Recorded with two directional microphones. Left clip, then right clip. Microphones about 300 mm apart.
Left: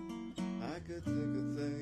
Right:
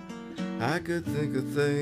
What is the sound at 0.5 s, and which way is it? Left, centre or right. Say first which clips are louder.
Music: right 14 dB; right.